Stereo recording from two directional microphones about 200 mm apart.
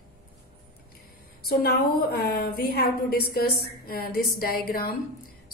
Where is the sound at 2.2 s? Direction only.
50° left (ahead or behind).